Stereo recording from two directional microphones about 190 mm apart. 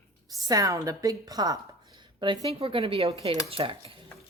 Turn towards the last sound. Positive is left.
turn(degrees=-30)  # may be behind; listen again after turning